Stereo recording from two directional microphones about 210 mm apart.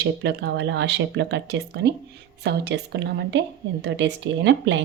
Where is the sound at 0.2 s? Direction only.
55° right (ahead or behind).